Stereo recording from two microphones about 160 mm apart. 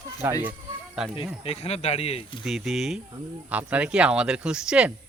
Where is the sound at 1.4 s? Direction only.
40° left (ahead or behind).